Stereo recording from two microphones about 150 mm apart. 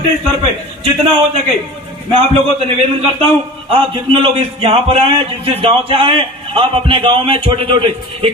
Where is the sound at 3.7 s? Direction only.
35° right (ahead or behind).